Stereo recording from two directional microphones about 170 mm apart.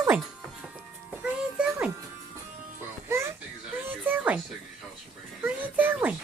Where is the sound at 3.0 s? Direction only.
15° right (ahead or behind).